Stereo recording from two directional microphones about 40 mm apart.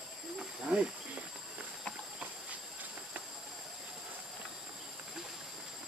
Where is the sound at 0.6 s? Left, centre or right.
Right.